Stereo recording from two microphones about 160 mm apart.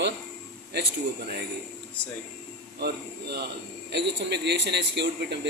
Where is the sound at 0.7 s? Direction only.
90° right.